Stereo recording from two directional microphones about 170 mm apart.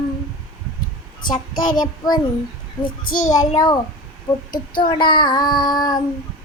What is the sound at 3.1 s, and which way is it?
Child singing, 50° left (ahead or behind).